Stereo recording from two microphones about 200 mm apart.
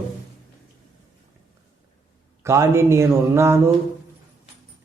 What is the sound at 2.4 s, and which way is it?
Speech, 15° right (ahead or behind).